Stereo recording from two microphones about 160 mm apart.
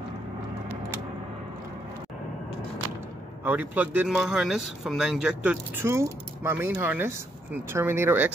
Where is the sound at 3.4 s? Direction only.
10° right (ahead or behind).